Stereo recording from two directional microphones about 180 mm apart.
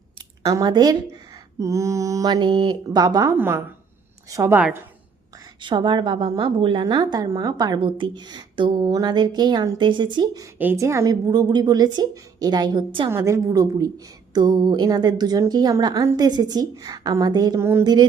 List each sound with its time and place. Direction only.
0.4 s a woman's voice: 20° right (ahead or behind)
5.6 s a woman's voice: 25° right (ahead or behind)
13.1 s a woman's voice: 15° right (ahead or behind)